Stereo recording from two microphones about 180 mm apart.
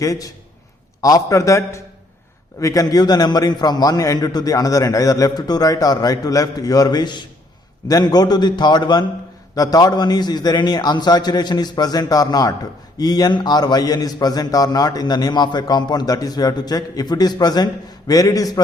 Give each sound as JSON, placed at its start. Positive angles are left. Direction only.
{"t": 0.0, "sound": "a man's voice", "side_deg": 20}